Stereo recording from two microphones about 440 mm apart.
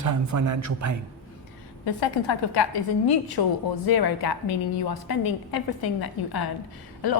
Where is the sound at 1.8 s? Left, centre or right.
Left.